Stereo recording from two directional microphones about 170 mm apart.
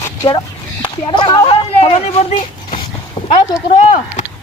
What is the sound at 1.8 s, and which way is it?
Speech, 35° left (ahead or behind).